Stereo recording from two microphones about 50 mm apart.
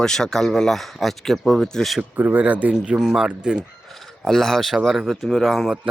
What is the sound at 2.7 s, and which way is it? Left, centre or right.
Speech, centre.